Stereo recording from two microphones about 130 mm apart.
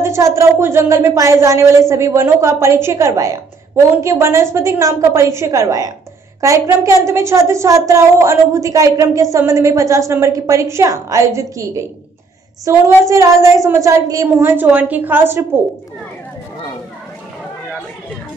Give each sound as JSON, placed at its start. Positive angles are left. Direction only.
{"t": 0.0, "sound": "a woman's voice", "side_deg": -20}